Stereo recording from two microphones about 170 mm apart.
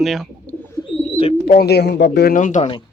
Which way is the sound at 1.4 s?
70° left (ahead or behind).